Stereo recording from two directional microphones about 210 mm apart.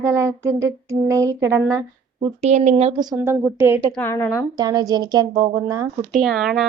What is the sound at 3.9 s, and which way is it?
Speech, 10° left (ahead or behind).